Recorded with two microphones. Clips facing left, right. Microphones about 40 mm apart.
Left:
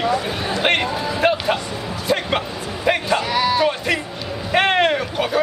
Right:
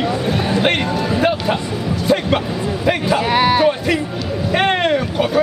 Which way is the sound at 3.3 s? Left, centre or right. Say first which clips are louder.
Right 5 dB; right.